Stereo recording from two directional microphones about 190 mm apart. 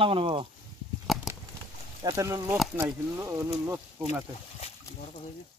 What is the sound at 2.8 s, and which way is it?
Speech, 15° right (ahead or behind).